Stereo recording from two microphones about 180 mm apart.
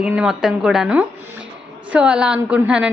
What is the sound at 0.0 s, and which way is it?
A woman's voice, 5° right (ahead or behind).